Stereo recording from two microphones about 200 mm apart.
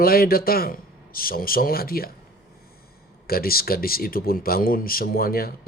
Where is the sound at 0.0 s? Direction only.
50° left (ahead or behind).